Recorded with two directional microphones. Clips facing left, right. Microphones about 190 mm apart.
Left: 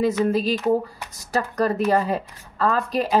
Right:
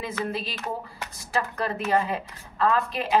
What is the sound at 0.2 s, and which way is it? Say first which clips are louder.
A woman's voice: left 10 dB; 40° left (ahead or behind).